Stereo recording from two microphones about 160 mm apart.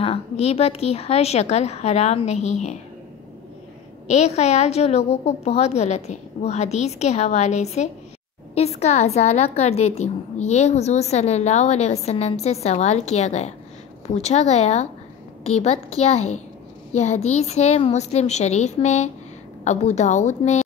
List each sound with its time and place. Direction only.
0.0 s a woman's voice: 40° left (ahead or behind)
4.1 s a woman's voice: 45° left (ahead or behind)